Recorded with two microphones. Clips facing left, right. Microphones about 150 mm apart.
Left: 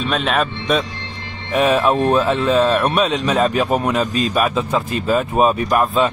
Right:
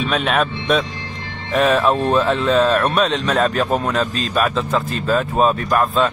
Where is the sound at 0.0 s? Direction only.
Centre (ahead or behind).